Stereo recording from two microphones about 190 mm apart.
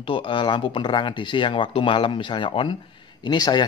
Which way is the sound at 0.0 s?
25° left (ahead or behind).